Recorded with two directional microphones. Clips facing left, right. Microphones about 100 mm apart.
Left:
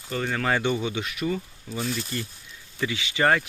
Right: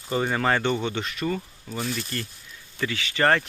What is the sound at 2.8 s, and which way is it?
Speech, 15° left (ahead or behind).